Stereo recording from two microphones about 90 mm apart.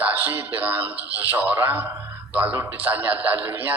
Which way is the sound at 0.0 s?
20° right (ahead or behind).